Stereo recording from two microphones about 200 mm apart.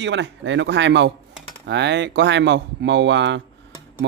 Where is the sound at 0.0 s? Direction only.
65° right (ahead or behind).